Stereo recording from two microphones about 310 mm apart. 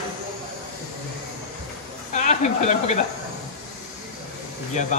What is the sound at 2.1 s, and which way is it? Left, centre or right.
Speech, left.